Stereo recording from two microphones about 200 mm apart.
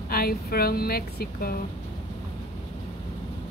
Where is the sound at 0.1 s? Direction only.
50° left (ahead or behind).